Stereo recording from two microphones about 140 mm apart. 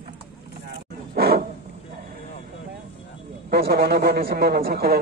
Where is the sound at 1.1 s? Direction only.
90° right.